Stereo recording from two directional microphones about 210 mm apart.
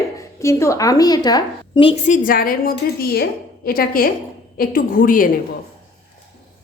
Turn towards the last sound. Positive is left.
turn(degrees=40)  # may be behind; listen again after turning